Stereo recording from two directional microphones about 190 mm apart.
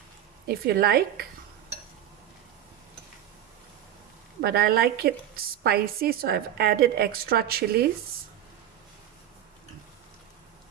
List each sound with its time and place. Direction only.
0.4 s a woman's voice: 55° right (ahead or behind)
4.4 s a woman's voice: 55° right (ahead or behind)